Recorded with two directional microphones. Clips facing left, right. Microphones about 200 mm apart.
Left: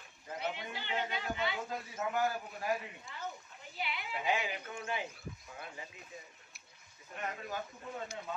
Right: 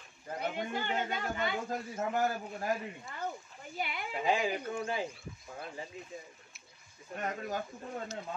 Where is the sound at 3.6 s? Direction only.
50° right (ahead or behind).